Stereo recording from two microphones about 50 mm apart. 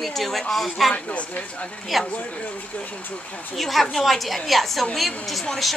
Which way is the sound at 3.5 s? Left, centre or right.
Centre.